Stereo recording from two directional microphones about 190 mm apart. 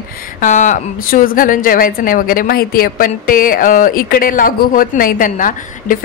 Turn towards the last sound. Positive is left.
turn(degrees=45)  # may be behind; listen again after turning